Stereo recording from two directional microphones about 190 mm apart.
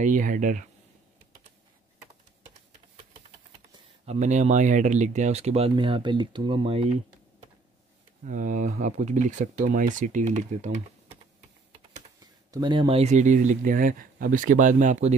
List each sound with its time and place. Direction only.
0.0 s speech: 40° right (ahead or behind)
4.0 s speech: 35° right (ahead or behind)
8.3 s speech: 45° right (ahead or behind)
12.4 s speech: 20° right (ahead or behind); by 15.1 s 40° right (ahead or behind)